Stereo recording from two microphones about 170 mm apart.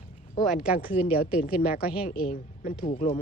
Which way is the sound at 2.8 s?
40° left (ahead or behind).